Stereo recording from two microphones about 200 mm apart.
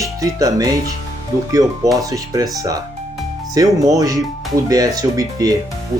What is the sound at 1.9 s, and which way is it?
Speech, 15° right (ahead or behind).